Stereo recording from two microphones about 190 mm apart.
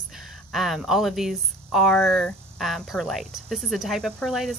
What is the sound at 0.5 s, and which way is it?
Speech, centre (ahead or behind).